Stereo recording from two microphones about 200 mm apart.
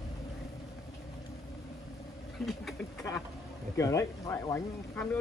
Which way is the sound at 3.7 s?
15° left (ahead or behind).